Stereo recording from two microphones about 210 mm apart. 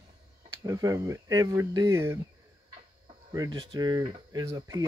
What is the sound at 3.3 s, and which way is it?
Speech, 15° right (ahead or behind).